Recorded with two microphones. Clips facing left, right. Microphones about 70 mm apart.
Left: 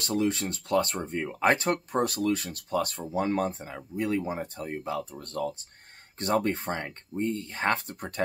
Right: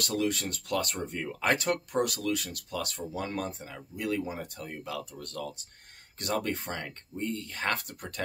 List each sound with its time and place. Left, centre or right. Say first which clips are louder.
0.0 s speech: left 3 dB; left